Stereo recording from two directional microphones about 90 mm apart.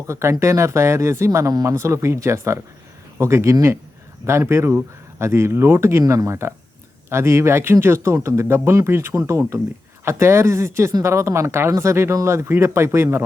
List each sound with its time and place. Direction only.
0.1 s speech: 30° right (ahead or behind)